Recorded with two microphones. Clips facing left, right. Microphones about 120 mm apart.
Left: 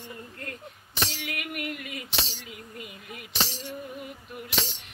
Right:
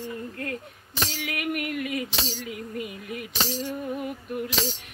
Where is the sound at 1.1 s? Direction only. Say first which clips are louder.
Right 6 dB; 45° right (ahead or behind).